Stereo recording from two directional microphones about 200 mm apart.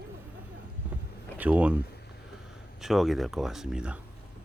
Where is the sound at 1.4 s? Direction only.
10° right (ahead or behind).